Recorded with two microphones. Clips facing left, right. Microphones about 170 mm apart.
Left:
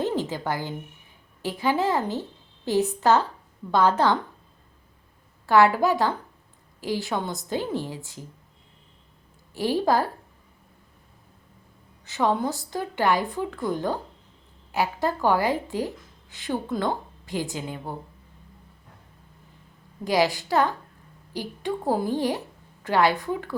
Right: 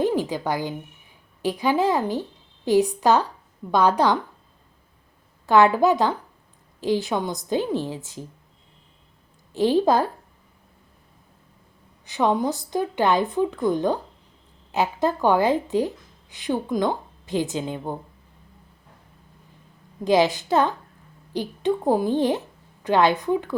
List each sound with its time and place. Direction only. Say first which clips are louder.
0.0 s a woman's voice: right 4 dB; 15° right (ahead or behind)
5.5 s a woman's voice: right 2 dB; 20° right (ahead or behind)
9.5 s a woman's voice: right 4 dB; 20° right (ahead or behind)
12.0 s a woman's voice: right 2 dB; 15° right (ahead or behind)
20.1 s a woman's voice: right 4 dB; 20° right (ahead or behind)